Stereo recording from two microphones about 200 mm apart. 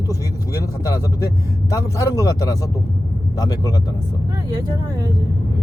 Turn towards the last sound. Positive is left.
turn(degrees=20)  # may be behind; listen again after turning